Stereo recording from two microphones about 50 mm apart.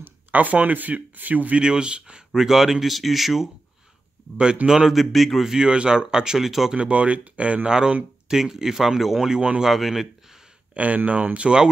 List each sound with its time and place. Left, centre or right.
0.3 s speech: right
1.6 s speech: centre
4.6 s speech: centre
5.5 s speech: centre
6.7 s speech: right
8.3 s speech: centre
9.3 s speech: right
9.6 s speech: centre
10.7 s speech: right